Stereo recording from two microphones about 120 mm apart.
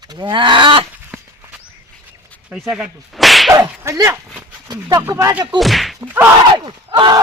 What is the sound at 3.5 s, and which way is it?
Whip, 25° right (ahead or behind).